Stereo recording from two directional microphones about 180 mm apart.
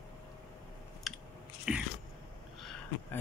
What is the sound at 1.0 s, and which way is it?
Biting, centre (ahead or behind).